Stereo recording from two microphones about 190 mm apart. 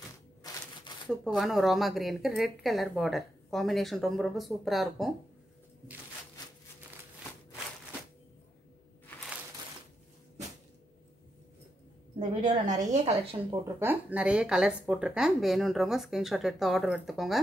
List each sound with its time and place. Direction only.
1.0 s speech: centre (ahead or behind)
12.2 s a woman's voice: 40° right (ahead or behind)
12.9 s a woman's voice: 30° right (ahead or behind)
13.7 s speech: 10° right (ahead or behind)